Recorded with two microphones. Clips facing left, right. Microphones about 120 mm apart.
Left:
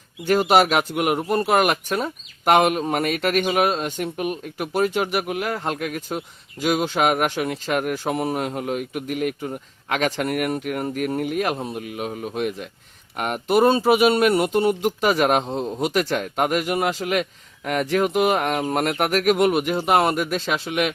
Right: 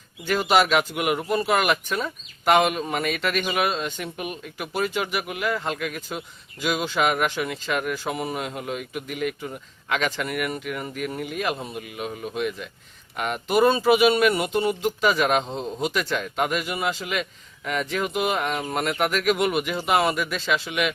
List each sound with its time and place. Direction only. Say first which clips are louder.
0.3 s speech: left 3 dB; 45° left (ahead or behind)
11.5 s speech: left 4 dB; 35° left (ahead or behind)